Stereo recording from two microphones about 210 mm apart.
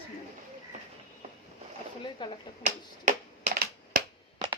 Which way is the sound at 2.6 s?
35° right (ahead or behind).